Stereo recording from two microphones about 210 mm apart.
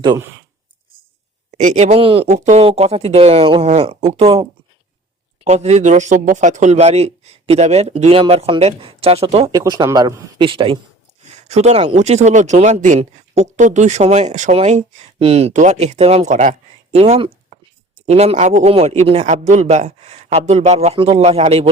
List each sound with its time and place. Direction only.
0.0 s speech: 20° right (ahead or behind)
1.5 s speech: 35° right (ahead or behind)
5.5 s speech: 30° right (ahead or behind)